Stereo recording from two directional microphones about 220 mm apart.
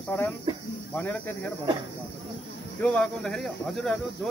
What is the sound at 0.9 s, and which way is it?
Speech, 5° left (ahead or behind).